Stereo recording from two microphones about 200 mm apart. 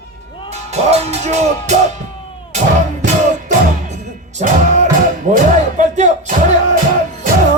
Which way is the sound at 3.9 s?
35° right (ahead or behind).